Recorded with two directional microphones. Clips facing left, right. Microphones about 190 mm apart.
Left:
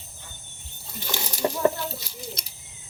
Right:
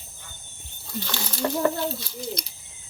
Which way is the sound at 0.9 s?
15° left (ahead or behind).